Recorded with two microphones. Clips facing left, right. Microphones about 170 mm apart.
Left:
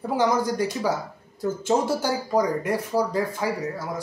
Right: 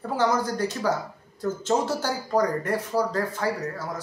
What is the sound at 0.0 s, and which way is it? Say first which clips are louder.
Speech: left 2 dB; 10° left (ahead or behind).